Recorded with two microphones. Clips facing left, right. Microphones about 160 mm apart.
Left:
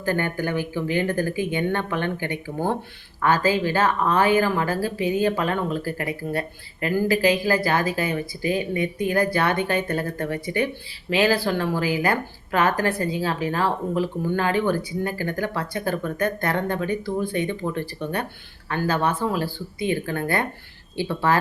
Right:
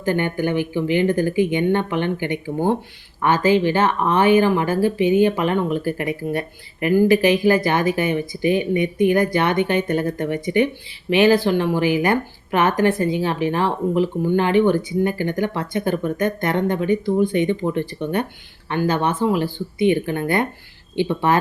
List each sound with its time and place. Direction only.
0.0 s speech: 20° right (ahead or behind)